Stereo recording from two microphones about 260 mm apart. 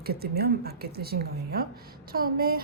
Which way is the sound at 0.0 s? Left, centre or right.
Right.